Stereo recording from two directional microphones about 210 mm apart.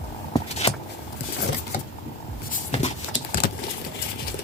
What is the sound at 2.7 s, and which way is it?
Patter, 35° left (ahead or behind).